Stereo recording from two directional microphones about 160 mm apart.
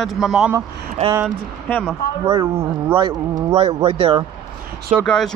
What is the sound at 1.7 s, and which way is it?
Speech, 10° left (ahead or behind).